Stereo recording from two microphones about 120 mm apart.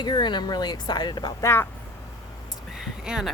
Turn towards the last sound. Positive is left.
turn(degrees=-5)  # may be behind; listen again after turning